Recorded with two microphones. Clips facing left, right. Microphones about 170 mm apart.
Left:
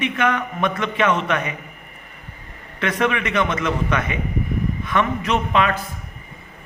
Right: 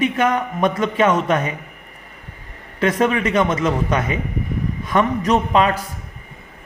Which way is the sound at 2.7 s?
40° right (ahead or behind).